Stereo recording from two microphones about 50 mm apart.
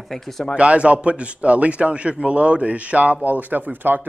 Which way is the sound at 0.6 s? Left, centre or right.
Right.